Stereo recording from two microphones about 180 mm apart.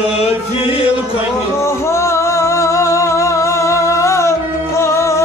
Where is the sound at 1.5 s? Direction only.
15° left (ahead or behind).